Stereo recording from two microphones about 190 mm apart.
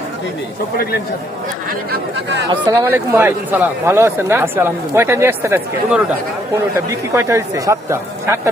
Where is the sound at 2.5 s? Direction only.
15° right (ahead or behind).